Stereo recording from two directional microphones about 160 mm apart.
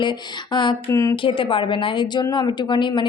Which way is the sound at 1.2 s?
30° left (ahead or behind).